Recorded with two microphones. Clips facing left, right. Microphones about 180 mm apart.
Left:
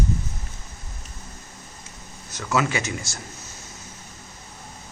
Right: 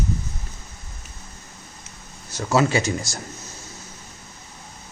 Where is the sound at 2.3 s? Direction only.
30° right (ahead or behind).